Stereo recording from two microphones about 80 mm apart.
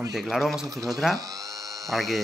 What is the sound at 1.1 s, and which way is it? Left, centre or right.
Dental drill, right.